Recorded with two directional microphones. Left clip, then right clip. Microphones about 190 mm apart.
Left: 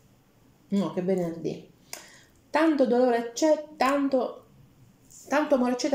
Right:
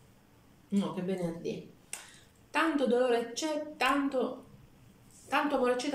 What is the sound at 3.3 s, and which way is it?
Speech, 30° left (ahead or behind).